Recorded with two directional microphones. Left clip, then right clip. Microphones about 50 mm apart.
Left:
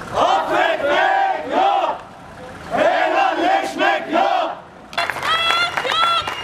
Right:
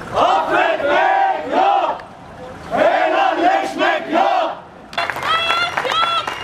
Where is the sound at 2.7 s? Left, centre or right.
Centre.